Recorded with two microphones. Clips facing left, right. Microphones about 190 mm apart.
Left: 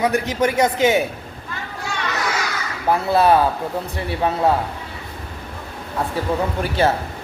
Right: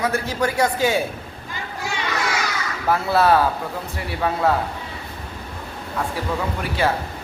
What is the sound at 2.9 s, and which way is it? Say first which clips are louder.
Speech: left 2 dB; 20° left (ahead or behind).